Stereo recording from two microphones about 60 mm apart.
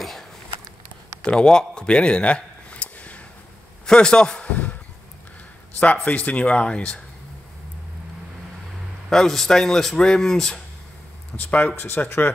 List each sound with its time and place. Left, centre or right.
1.2 s a sound: centre
3.8 s a man's voice: centre
6.0 s speech: left
9.1 s speech: centre
11.3 s speech: left